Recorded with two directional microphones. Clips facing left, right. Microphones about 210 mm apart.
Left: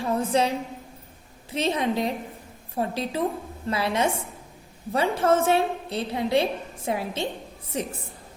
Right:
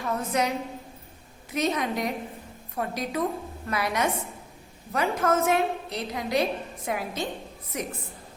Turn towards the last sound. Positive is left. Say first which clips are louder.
# left 3 dB
turn(degrees=30)  # may be behind; listen again after turning